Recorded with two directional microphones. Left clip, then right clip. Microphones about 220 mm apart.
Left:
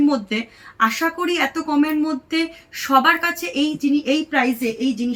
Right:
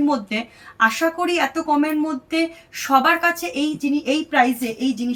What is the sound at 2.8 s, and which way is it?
A woman's voice, 15° right (ahead or behind).